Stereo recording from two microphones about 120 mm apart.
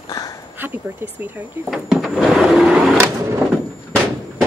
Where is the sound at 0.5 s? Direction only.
15° right (ahead or behind).